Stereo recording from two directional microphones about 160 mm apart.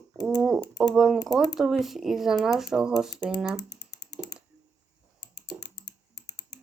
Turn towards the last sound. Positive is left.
turn(degrees=90)